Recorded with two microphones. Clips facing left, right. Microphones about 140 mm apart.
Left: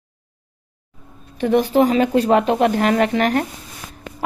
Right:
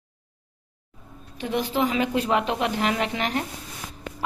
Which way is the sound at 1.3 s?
50° left (ahead or behind).